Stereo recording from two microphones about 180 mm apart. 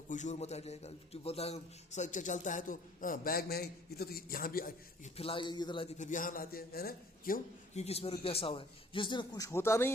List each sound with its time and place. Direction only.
0.1 s a man's voice: 40° left (ahead or behind)
5.1 s a man's voice: 30° left (ahead or behind)
6.0 s a man's voice: 45° left (ahead or behind)
7.9 s a man's voice: 35° left (ahead or behind); by 9.9 s 15° left (ahead or behind)